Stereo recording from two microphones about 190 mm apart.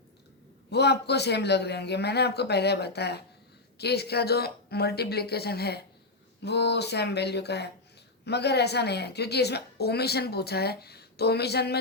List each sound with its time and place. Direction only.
0.7 s a woman's voice: 60° left (ahead or behind)